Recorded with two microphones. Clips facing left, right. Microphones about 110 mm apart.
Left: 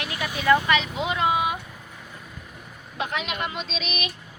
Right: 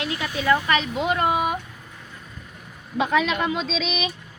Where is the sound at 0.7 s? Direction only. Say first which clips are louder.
Right 2 dB; 45° right (ahead or behind).